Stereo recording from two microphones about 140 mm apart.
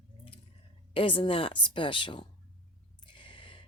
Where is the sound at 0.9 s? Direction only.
40° left (ahead or behind).